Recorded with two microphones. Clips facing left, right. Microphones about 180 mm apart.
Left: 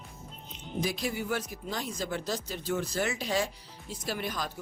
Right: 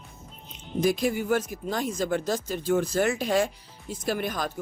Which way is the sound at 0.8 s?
50° right (ahead or behind).